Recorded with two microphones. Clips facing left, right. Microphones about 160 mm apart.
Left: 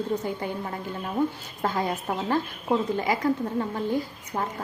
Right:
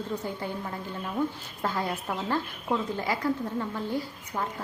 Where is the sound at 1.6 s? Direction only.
15° left (ahead or behind).